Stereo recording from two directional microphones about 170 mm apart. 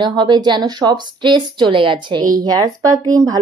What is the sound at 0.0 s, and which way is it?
A woman's voice, 25° right (ahead or behind).